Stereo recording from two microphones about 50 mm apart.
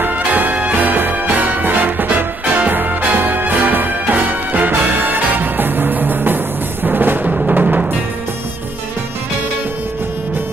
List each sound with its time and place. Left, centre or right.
0.0 s music: right
7.2 s music: right